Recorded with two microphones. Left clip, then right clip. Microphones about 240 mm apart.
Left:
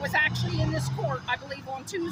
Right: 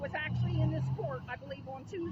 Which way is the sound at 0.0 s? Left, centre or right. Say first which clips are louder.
Left 13 dB; centre.